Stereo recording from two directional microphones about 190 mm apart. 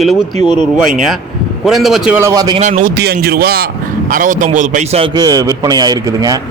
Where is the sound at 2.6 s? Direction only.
40° right (ahead or behind).